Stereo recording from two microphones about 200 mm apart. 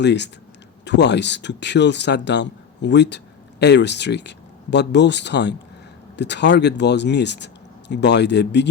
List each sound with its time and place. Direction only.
0.0 s speech: 60° left (ahead or behind)